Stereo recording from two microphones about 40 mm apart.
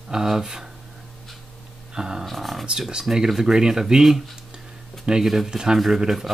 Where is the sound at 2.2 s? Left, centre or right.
Centre.